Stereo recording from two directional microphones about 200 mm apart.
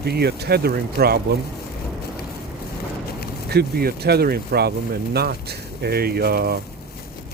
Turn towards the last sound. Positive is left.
turn(degrees=-50)  # may be behind; listen again after turning